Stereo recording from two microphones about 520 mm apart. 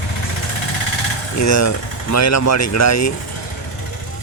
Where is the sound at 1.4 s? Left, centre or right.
Left.